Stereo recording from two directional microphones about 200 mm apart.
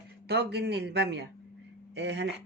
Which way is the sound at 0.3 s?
55° right (ahead or behind).